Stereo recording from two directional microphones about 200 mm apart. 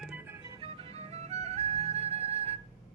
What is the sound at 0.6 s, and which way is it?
Music, 30° right (ahead or behind).